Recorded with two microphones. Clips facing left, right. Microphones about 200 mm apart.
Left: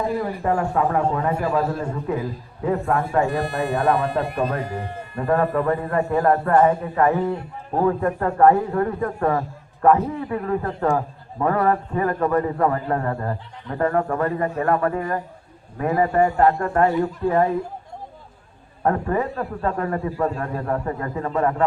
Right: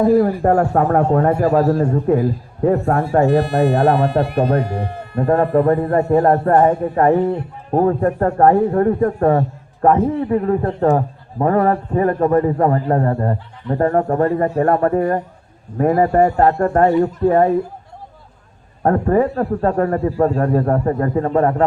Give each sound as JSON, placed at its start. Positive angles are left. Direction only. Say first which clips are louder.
{"t": 0.1, "sound": "a man's voice", "louder": "right 9 dB", "side_deg": -45}
{"t": 3.2, "sound": "speech", "louder": "right 9 dB", "side_deg": -65}
{"t": 5.2, "sound": "a man's voice", "louder": "right 6 dB", "side_deg": -30}
{"t": 18.8, "sound": "a man's voice", "louder": "right 7 dB", "side_deg": -40}